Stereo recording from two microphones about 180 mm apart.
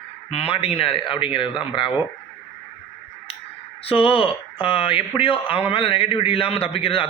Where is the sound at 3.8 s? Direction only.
30° left (ahead or behind).